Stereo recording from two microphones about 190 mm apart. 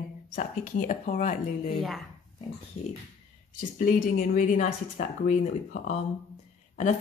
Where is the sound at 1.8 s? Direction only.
Centre (ahead or behind).